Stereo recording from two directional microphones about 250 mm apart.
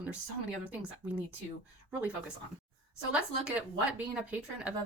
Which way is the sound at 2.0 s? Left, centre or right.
Centre.